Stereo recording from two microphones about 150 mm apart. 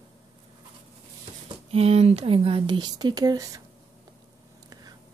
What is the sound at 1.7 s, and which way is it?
Speech, 40° right (ahead or behind).